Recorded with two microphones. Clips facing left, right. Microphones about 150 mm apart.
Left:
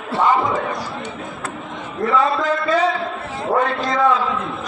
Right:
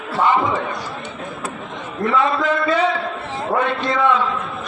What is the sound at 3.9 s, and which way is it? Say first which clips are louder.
Speech: left 1 dB; 40° left (ahead or behind).